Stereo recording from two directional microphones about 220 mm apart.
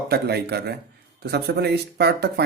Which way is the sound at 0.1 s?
45° right (ahead or behind).